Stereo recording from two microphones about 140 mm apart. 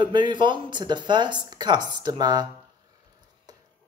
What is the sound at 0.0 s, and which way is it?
Speech, 35° right (ahead or behind).